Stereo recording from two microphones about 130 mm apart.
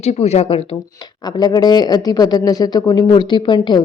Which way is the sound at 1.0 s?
30° left (ahead or behind).